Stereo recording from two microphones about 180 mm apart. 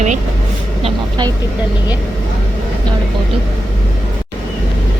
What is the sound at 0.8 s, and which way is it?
Speech, 25° right (ahead or behind).